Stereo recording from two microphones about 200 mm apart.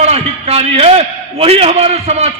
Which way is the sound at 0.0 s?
30° right (ahead or behind).